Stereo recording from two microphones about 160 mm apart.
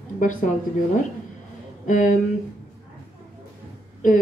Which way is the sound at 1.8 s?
55° left (ahead or behind).